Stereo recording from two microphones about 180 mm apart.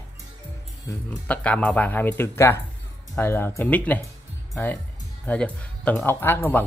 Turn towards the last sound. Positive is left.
turn(degrees=10)  # may be behind; listen again after turning